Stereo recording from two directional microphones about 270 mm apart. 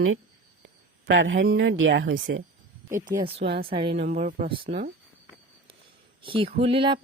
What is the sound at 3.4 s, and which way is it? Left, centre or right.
Speech, right.